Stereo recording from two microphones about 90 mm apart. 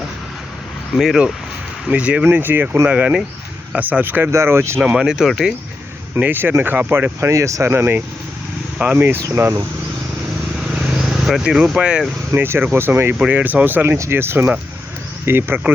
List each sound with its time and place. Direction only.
0.9 s speech: 5° right (ahead or behind); by 2.6 s 20° right (ahead or behind)
2.8 s speech: 5° right (ahead or behind)
3.7 s speech: 15° right (ahead or behind)
4.3 s speech: 30° right (ahead or behind)
4.9 s speech: 5° right (ahead or behind)
6.1 s speech: 20° right (ahead or behind)
9.3 s speech: 25° right (ahead or behind)
10.8 s vehicle: 10° right (ahead or behind)
12.3 s speech: 25° right (ahead or behind)